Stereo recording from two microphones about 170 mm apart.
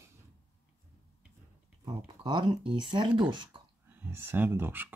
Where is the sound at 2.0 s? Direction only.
25° right (ahead or behind).